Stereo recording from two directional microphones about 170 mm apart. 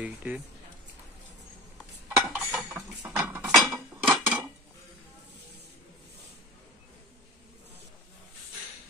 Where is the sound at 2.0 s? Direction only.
10° right (ahead or behind).